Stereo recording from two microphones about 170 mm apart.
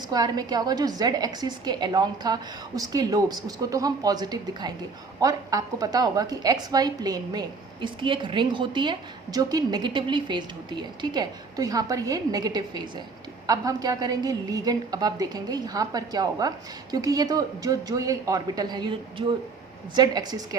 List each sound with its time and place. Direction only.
0.1 s a woman's voice: 25° right (ahead or behind)